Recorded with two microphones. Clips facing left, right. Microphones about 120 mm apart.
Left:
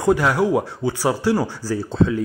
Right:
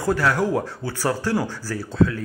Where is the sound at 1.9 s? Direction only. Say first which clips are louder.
Even; 25° left (ahead or behind).